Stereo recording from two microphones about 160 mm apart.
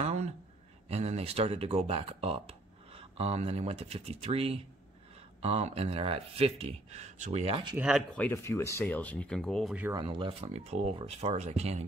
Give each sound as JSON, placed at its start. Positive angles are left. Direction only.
{"t": 0.0, "sound": "a sound", "side_deg": -45}
{"t": 0.8, "sound": "speech", "side_deg": -40}
{"t": 7.7, "sound": "speech", "side_deg": -5}
{"t": 8.2, "sound": "speech", "side_deg": 15}
{"t": 9.9, "sound": "speech", "side_deg": -30}